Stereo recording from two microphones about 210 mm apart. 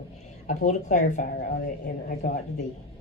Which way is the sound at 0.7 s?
35° left (ahead or behind).